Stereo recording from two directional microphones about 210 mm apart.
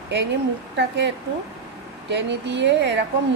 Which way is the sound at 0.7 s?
55° right (ahead or behind).